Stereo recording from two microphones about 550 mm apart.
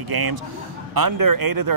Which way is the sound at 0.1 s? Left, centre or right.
Right.